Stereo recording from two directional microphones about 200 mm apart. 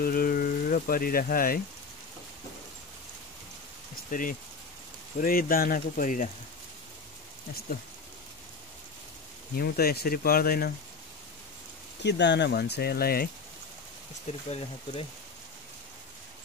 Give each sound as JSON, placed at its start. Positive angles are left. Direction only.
{"t": 0.0, "sound": "speech", "side_deg": 45}
{"t": 4.1, "sound": "speech", "side_deg": 40}
{"t": 9.6, "sound": "speech", "side_deg": 50}
{"t": 12.0, "sound": "speech", "side_deg": 60}
{"t": 14.2, "sound": "speech", "side_deg": 35}